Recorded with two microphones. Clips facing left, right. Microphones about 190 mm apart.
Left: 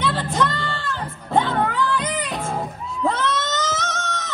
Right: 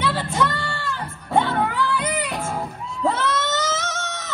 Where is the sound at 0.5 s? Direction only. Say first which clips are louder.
Left 1 dB; 15° right (ahead or behind).